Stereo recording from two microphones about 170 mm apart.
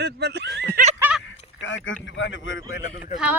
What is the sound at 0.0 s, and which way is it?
Speech, 80° right.